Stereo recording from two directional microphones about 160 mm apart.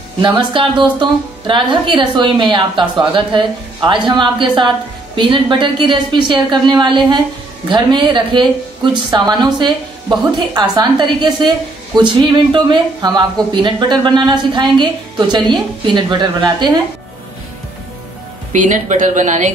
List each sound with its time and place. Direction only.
0.2 s a woman's voice: 30° right (ahead or behind)
18.5 s speech: 50° right (ahead or behind)